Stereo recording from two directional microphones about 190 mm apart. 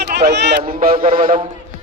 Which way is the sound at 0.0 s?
60° right (ahead or behind).